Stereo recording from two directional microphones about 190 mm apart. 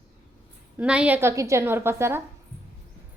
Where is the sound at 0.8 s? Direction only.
5° right (ahead or behind).